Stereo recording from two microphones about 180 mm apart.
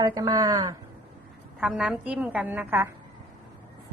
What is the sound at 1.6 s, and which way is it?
Speech, 5° right (ahead or behind).